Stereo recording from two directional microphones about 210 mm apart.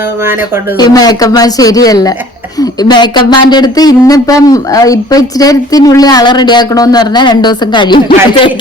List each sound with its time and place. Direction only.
0.8 s speech: 20° left (ahead or behind)